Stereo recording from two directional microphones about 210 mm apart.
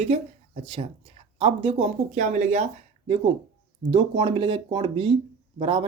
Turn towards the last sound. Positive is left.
turn(degrees=-25)  # may be behind; listen again after turning